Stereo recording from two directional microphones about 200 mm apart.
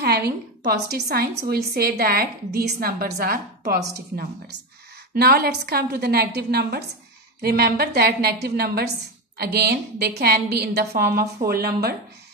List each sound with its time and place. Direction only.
0.0 s a woman's voice: 50° right (ahead or behind)